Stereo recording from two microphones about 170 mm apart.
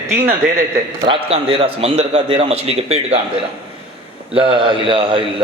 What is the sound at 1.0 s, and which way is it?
A man's voice, 35° right (ahead or behind).